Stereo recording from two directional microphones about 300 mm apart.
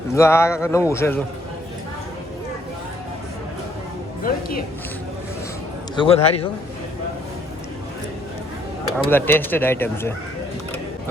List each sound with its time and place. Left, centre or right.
0.1 s speech: centre
4.2 s a man's voice: left
6.0 s a man's voice: centre
9.0 s speech: centre